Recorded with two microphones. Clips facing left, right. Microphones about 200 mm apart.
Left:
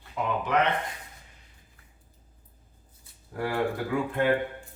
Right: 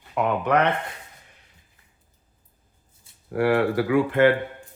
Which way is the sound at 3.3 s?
75° right (ahead or behind).